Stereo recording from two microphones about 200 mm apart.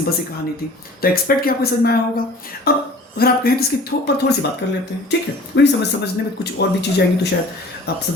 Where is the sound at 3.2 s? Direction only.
50° left (ahead or behind).